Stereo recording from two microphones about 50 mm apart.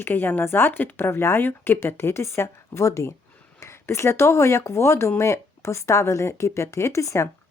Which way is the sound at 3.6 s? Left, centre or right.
Left.